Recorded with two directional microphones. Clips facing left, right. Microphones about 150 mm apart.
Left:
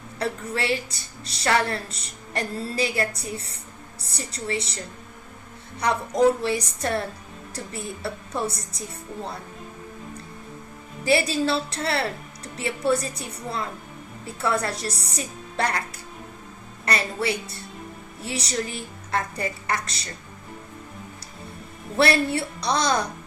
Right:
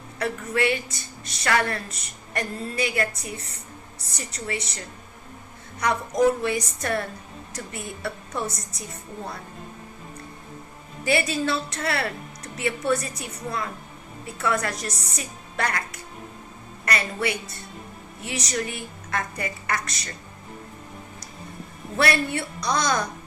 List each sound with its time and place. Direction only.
0.2 s a woman's voice: 30° left (ahead or behind)
5.8 s a woman's voice: 30° left (ahead or behind)
11.0 s speech: 30° left (ahead or behind)
16.8 s speech: 30° left (ahead or behind)
21.9 s a woman's voice: 30° left (ahead or behind)